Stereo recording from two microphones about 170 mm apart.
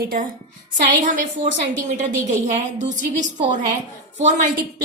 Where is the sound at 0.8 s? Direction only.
45° right (ahead or behind).